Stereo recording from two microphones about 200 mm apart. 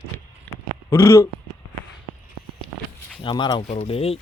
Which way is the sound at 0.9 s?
15° left (ahead or behind).